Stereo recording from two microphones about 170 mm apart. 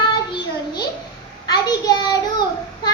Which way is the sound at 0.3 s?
25° left (ahead or behind).